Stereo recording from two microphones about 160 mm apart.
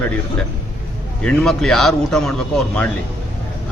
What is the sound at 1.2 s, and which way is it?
A man's voice, 5° left (ahead or behind).